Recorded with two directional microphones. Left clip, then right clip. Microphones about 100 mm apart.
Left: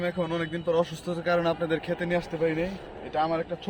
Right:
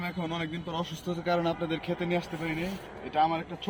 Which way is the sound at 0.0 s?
55° left (ahead or behind).